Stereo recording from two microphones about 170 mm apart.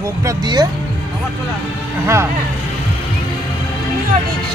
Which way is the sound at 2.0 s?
15° right (ahead or behind).